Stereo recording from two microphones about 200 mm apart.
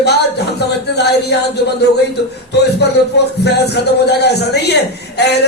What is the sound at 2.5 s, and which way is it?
A man's voice, 55° left (ahead or behind).